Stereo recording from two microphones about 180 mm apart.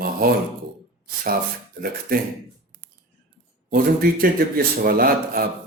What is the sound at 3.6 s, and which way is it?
Speech, 55° right (ahead or behind).